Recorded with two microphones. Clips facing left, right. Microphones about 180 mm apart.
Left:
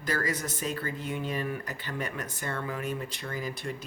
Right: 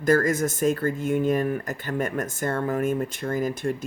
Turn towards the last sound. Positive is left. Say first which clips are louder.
# right 9 dB
turn(degrees=-45)  # may be behind; listen again after turning